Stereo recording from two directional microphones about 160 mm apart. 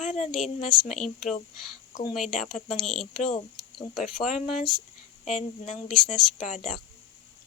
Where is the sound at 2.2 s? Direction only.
50° left (ahead or behind).